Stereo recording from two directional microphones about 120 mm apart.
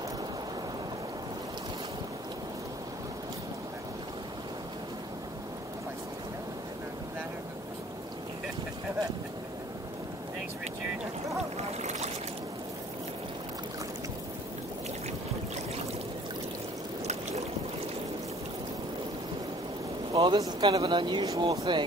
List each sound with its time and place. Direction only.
11.5 s boat: 65° right (ahead or behind)
20.2 s speech: 35° right (ahead or behind)